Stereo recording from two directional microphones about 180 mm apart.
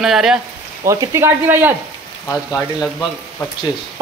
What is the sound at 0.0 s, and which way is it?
Speech, centre (ahead or behind).